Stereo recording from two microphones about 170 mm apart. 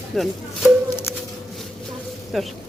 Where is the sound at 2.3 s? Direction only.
Centre (ahead or behind).